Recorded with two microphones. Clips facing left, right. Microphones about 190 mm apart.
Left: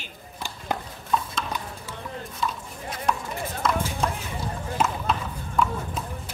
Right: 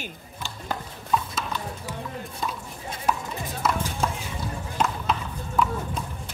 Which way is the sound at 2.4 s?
45° right (ahead or behind).